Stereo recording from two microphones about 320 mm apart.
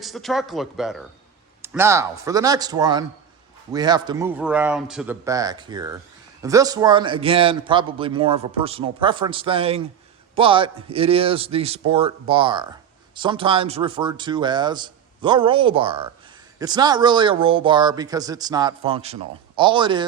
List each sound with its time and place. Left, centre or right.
0.0 s speech: centre